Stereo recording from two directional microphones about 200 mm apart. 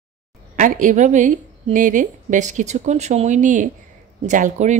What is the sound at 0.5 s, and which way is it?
A woman's voice, 40° right (ahead or behind).